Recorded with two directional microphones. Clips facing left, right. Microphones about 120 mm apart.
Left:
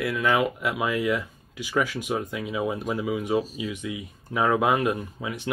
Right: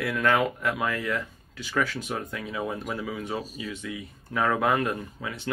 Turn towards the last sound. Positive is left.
turn(degrees=15)  # may be behind; listen again after turning